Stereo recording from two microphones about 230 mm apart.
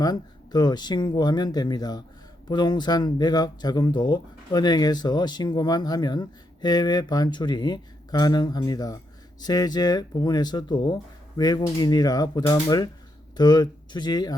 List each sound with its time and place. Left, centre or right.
0.0 s speech: centre